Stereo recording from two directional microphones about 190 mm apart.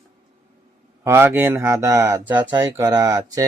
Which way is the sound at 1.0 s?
15° right (ahead or behind).